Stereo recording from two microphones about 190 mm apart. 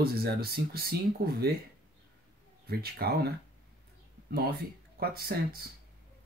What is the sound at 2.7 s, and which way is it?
Speech, 55° right (ahead or behind).